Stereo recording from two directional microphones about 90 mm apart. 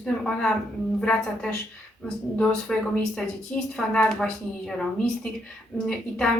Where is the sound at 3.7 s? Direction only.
10° left (ahead or behind).